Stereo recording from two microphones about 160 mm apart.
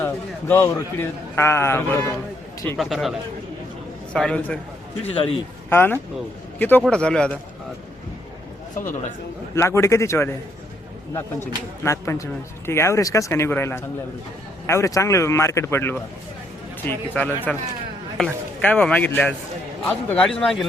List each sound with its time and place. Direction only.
0.0 s speech: 15° left (ahead or behind)
2.7 s speech: centre (ahead or behind)
5.0 s speech: 35° left (ahead or behind)
5.6 s speech: 15° left (ahead or behind)
9.6 s speech: 15° left (ahead or behind); by 20.7 s centre (ahead or behind)